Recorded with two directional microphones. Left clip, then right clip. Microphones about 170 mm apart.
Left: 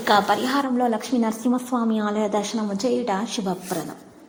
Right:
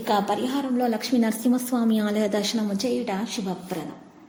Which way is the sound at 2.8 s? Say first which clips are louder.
Left 4 dB; 5° left (ahead or behind).